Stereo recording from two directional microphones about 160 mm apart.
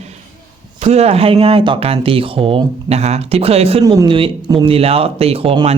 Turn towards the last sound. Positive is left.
turn(degrees=-35)  # may be behind; listen again after turning